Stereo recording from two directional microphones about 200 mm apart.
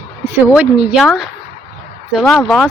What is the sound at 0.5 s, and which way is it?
Speech, 5° right (ahead or behind).